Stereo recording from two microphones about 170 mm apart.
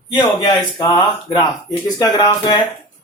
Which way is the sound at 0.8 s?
25° left (ahead or behind).